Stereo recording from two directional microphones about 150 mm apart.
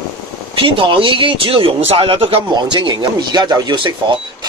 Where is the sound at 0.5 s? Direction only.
35° right (ahead or behind).